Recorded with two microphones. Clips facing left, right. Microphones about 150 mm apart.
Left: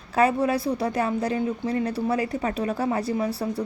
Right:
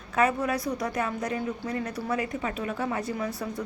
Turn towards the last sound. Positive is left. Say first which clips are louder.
# left 6 dB
turn(degrees=35)  # may be behind; listen again after turning